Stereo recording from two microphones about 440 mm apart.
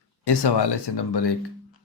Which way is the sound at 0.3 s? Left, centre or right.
Left.